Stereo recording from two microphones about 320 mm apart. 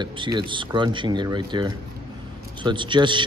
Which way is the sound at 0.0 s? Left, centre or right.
Centre.